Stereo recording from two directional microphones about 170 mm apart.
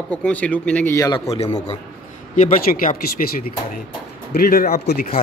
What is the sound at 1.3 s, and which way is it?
Speech, 40° left (ahead or behind).